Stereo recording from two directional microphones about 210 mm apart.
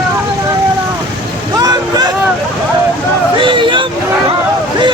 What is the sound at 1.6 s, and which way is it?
Vehicle, 20° right (ahead or behind).